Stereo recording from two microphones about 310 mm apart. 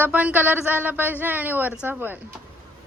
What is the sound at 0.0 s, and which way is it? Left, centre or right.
A man's voice, centre.